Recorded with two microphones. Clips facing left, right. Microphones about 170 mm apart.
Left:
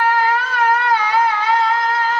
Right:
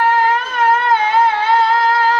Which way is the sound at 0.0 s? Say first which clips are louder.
Right 2 dB; 25° right (ahead or behind).